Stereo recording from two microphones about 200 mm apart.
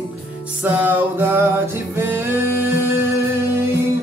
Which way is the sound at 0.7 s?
10° right (ahead or behind).